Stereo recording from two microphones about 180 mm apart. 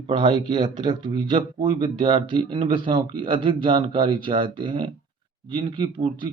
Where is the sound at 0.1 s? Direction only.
25° right (ahead or behind).